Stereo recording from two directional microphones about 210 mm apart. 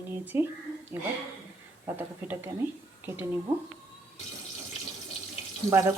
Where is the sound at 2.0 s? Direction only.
10° right (ahead or behind).